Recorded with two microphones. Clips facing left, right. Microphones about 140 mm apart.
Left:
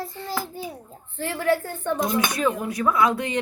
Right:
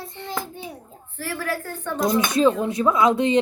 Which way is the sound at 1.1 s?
25° left (ahead or behind).